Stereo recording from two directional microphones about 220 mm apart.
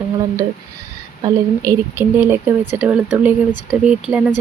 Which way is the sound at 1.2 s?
15° right (ahead or behind).